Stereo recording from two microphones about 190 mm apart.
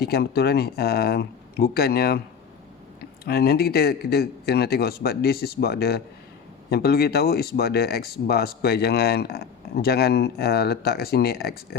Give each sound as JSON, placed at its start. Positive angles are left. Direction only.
{"t": 0.0, "sound": "speech", "side_deg": 55}